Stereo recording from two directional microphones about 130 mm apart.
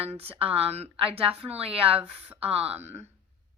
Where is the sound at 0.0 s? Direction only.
50° right (ahead or behind).